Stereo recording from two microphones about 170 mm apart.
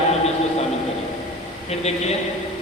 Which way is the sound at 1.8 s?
40° left (ahead or behind).